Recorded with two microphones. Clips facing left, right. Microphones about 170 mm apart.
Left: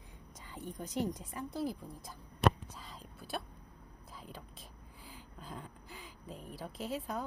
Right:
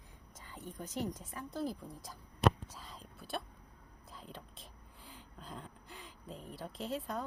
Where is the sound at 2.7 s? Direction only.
Centre (ahead or behind).